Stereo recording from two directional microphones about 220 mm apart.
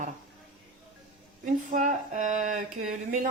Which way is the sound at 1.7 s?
35° right (ahead or behind).